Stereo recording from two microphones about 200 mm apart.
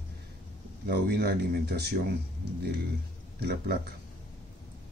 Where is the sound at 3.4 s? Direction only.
55° right (ahead or behind).